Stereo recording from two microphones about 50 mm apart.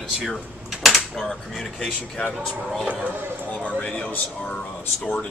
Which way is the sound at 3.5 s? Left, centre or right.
Left.